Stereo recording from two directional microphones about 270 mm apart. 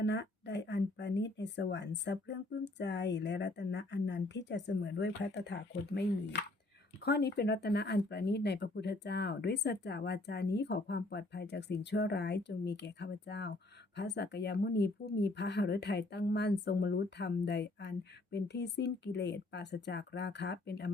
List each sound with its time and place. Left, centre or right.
0.0 s a woman's voice: left